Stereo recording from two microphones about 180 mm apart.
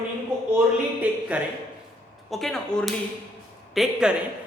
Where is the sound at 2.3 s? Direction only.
Centre (ahead or behind).